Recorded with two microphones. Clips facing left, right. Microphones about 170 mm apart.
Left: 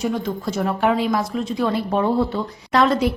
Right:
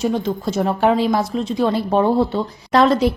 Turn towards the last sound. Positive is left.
turn(degrees=-35)  # may be behind; listen again after turning